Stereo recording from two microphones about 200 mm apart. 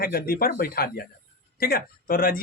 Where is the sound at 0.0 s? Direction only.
45° left (ahead or behind).